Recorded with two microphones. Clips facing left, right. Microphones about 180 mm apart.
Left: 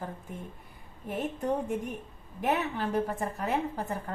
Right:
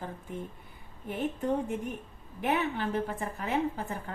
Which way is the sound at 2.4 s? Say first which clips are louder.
Even; 40° left (ahead or behind).